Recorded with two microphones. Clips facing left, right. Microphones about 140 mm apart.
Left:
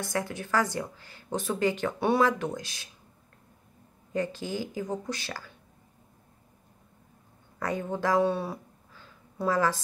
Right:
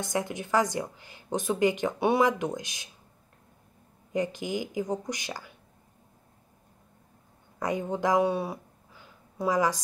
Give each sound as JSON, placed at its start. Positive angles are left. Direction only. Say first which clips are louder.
{"t": 0.0, "sound": "a woman's voice", "louder": "right 1 dB", "side_deg": -20}
{"t": 4.1, "sound": "speech", "louder": "right 1 dB", "side_deg": -15}
{"t": 7.5, "sound": "speech", "louder": "right 1 dB", "side_deg": -20}